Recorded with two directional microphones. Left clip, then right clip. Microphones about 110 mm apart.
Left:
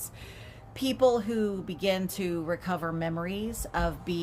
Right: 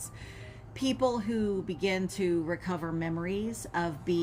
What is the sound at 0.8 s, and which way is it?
Speech, 35° left (ahead or behind).